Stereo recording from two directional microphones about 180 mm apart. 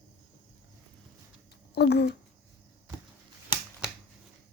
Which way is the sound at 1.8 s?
65° left (ahead or behind).